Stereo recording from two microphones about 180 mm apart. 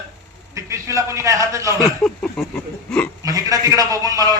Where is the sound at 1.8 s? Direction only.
5° left (ahead or behind).